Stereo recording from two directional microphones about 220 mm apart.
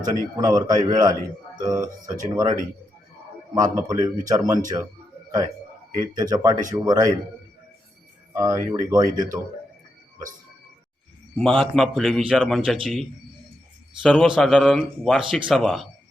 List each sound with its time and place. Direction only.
0.0 s speech: 15° right (ahead or behind)
6.1 s speech: 15° right (ahead or behind)
8.3 s speech: 15° right (ahead or behind)
11.3 s speech: 5° left (ahead or behind)